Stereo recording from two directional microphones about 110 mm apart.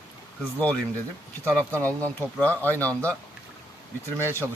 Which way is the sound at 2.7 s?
15° left (ahead or behind).